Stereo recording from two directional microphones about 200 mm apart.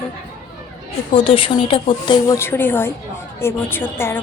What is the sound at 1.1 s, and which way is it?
A woman's voice, 25° left (ahead or behind).